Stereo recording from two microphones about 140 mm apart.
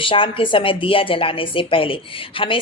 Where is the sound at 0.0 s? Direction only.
40° left (ahead or behind).